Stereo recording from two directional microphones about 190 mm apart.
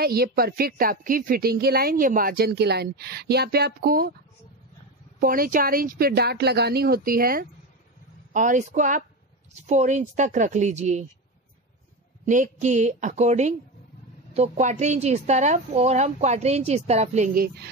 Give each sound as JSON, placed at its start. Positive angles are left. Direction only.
{"t": 0.0, "sound": "a woman's voice", "side_deg": -55}
{"t": 5.2, "sound": "a woman's voice", "side_deg": -50}
{"t": 12.3, "sound": "speech", "side_deg": -40}